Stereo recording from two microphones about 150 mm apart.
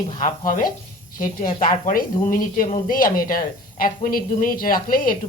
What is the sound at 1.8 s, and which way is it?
Speech, 65° left (ahead or behind).